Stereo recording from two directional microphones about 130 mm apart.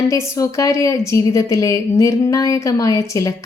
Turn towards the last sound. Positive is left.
turn(degrees=25)  # may be behind; listen again after turning